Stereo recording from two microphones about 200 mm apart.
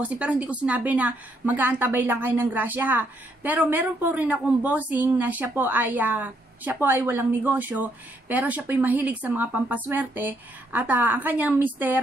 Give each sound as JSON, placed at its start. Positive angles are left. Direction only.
{"t": 0.0, "sound": "a woman's voice", "side_deg": -5}